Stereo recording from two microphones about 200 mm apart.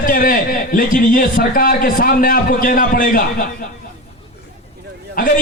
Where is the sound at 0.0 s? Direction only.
45° left (ahead or behind).